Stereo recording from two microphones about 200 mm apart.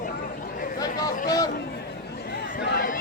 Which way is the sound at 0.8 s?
20° left (ahead or behind).